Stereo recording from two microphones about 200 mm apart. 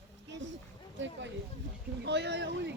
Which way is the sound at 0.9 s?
65° right (ahead or behind).